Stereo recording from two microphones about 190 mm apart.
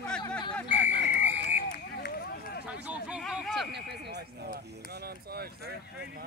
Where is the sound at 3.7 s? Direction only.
60° right (ahead or behind).